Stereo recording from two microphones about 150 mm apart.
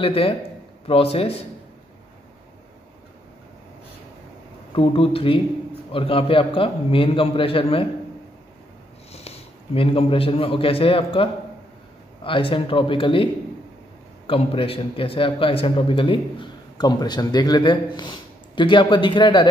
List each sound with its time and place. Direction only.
0.0 s speech: 40° left (ahead or behind)
4.7 s speech: 40° left (ahead or behind)
9.1 s a man's voice: 45° left (ahead or behind)